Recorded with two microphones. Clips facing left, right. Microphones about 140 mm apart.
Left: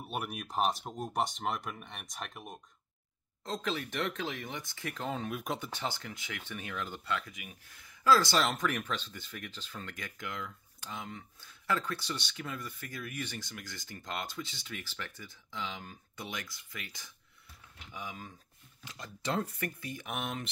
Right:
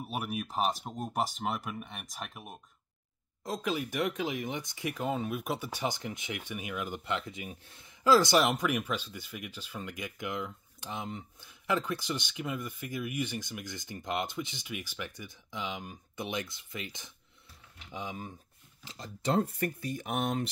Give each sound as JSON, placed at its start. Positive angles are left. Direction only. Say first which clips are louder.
{"t": 0.0, "sound": "speech", "louder": "right 3 dB", "side_deg": 0}
{"t": 18.9, "sound": "speech", "louder": "right 4 dB", "side_deg": -35}